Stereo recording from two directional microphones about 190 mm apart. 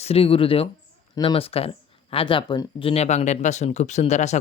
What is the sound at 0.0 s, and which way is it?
Speech, 30° left (ahead or behind).